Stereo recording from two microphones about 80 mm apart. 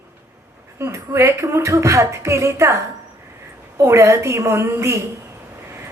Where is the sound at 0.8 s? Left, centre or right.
Right.